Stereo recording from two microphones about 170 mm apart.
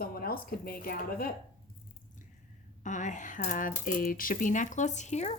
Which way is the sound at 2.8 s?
45° left (ahead or behind).